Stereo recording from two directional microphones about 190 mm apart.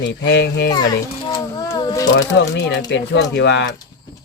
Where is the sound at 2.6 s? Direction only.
65° left (ahead or behind).